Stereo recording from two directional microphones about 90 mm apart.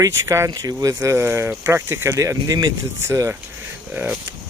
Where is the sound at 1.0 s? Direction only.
30° right (ahead or behind); by 2.7 s 45° right (ahead or behind).